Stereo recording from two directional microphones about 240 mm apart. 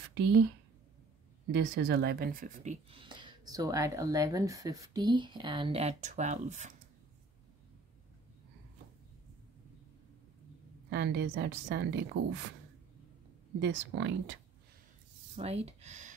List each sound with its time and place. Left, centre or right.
1.5 s speech: right
10.9 s a woman's voice: right
13.6 s a woman's voice: right
15.3 s speech: right